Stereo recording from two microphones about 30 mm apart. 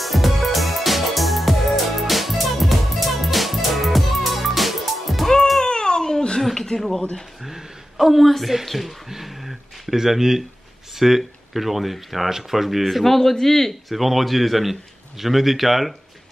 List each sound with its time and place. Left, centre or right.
0.0 s music: centre
5.7 s baby cry: left
6.7 s speech: left
8.0 s a man's voice: centre
9.1 s a sound: centre
9.9 s a man's voice: centre
12.9 s a man's voice: centre
13.8 s a man's voice: centre